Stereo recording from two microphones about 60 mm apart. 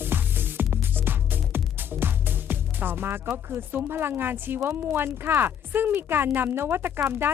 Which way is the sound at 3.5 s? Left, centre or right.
Right.